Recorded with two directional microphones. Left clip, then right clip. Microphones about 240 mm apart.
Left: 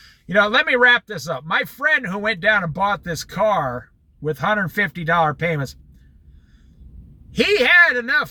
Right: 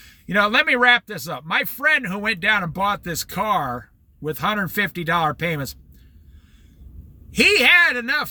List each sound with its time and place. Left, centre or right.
0.3 s a man's voice: centre
7.4 s a man's voice: centre